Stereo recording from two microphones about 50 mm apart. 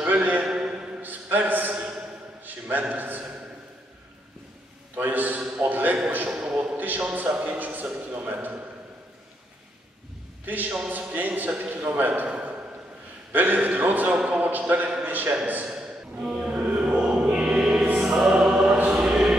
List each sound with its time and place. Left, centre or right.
0.0 s a sound: right
0.5 s a sound: centre
1.0 s a sound: right
2.9 s a man's voice: right
4.9 s a man's voice: right
6.3 s a man's voice: right
10.4 s a man's voice: right
12.3 s a sound: right
13.3 s a man's voice: right
15.7 s music: centre
16.5 s music: right
16.8 s music: centre
18.3 s music: right
18.9 s choir: centre